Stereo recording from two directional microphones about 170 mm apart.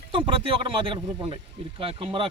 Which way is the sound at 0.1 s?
30° right (ahead or behind).